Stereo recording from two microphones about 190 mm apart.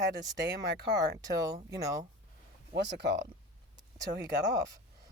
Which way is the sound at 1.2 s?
20° right (ahead or behind).